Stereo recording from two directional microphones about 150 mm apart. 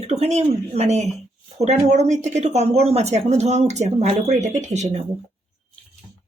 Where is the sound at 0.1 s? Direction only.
45° right (ahead or behind).